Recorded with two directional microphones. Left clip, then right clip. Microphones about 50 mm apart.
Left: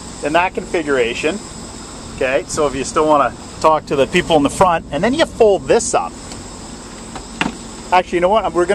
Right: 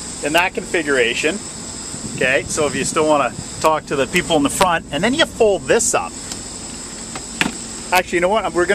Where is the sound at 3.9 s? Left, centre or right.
Left.